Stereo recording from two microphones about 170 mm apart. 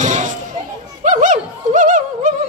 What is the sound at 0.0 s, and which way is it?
Children playing, 45° right (ahead or behind).